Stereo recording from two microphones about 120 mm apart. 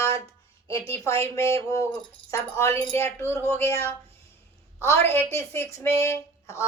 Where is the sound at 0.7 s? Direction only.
25° left (ahead or behind).